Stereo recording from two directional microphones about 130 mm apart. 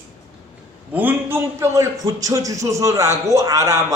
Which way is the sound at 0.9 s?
15° right (ahead or behind).